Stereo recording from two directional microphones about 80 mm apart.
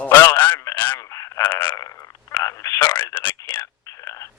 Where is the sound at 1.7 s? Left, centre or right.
Left.